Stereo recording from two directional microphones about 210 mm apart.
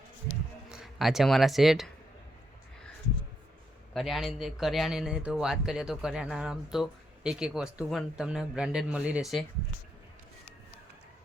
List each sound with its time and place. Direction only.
0.7 s speech: centre (ahead or behind)
3.9 s a man's voice: centre (ahead or behind)